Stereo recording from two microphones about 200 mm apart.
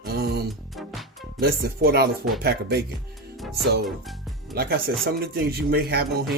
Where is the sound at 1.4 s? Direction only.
50° right (ahead or behind).